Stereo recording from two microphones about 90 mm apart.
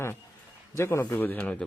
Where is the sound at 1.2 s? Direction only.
20° left (ahead or behind).